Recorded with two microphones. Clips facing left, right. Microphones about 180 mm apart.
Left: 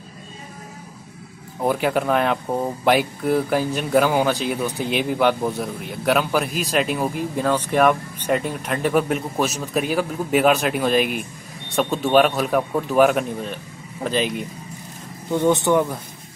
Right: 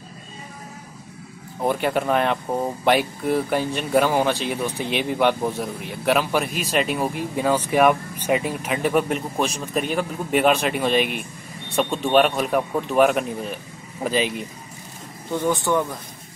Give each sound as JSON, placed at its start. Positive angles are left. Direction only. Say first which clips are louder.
{"t": 1.6, "sound": "speech", "louder": "left 1 dB", "side_deg": 0}
{"t": 15.3, "sound": "speech", "louder": "left 4 dB", "side_deg": 20}